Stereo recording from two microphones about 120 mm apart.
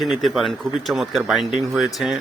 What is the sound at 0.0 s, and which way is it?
Speech, centre (ahead or behind).